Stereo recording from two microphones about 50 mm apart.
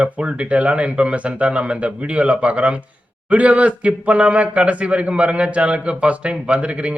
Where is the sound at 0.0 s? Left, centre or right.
Right.